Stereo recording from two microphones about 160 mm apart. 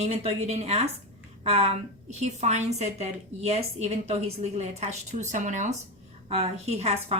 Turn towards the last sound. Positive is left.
turn(degrees=-40)  # may be behind; listen again after turning